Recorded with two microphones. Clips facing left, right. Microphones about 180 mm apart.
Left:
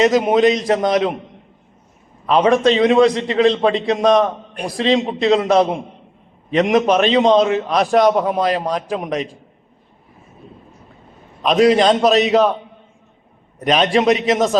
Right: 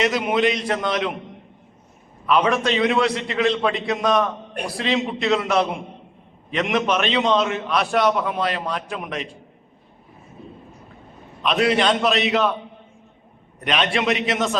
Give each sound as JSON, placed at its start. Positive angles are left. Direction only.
{"t": 0.0, "sound": "a man's voice", "side_deg": 40}
{"t": 2.2, "sound": "a man's voice", "side_deg": 35}
{"t": 11.6, "sound": "a man's voice", "side_deg": 40}
{"t": 13.7, "sound": "a man's voice", "side_deg": 40}